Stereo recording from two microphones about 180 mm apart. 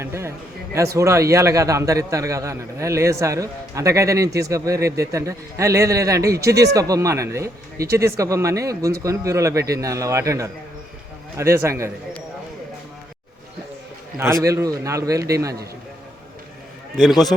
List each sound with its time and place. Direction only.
0.0 s speech: 15° right (ahead or behind)
14.4 s speech: 20° right (ahead or behind)